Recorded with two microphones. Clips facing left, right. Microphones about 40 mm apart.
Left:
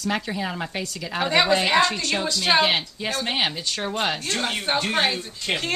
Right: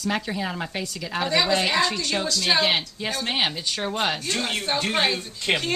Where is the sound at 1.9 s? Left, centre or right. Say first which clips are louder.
Left 1 dB; centre.